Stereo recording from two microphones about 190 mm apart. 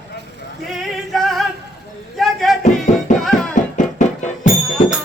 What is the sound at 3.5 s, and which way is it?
Music, 40° left (ahead or behind).